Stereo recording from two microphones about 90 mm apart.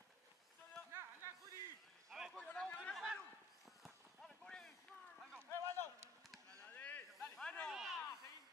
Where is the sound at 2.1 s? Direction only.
Centre (ahead or behind).